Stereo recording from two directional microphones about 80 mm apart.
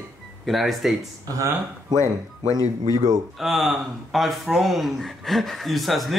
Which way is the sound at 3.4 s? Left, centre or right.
Centre.